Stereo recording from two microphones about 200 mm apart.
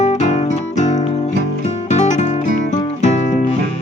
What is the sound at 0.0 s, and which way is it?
Music, 35° left (ahead or behind).